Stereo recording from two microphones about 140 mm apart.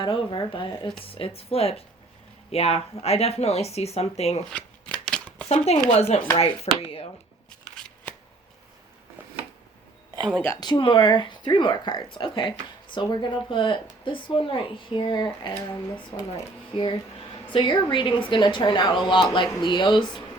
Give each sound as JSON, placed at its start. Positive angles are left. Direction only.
{"t": 0.0, "sound": "speech", "side_deg": 35}
{"t": 5.0, "sound": "shuffling cards", "side_deg": 5}
{"t": 5.5, "sound": "speech", "side_deg": 45}
{"t": 7.6, "sound": "shuffling cards", "side_deg": 5}
{"t": 10.6, "sound": "speech", "side_deg": 35}
{"t": 15.7, "sound": "speech", "side_deg": 20}
{"t": 16.7, "sound": "speech", "side_deg": 35}